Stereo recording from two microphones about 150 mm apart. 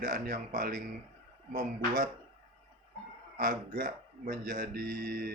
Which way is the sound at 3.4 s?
65° right (ahead or behind).